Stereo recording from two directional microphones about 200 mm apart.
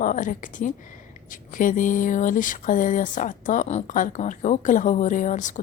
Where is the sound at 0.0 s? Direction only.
40° left (ahead or behind).